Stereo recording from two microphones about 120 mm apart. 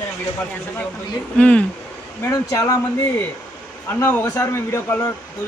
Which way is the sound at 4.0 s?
15° left (ahead or behind).